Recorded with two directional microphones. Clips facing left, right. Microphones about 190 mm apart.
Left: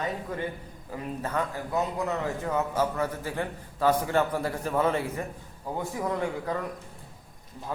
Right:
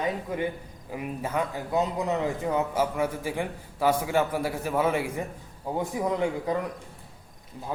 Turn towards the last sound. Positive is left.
turn(degrees=-15)  # may be behind; listen again after turning